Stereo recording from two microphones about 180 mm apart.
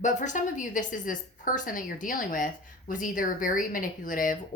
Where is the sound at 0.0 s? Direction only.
45° left (ahead or behind).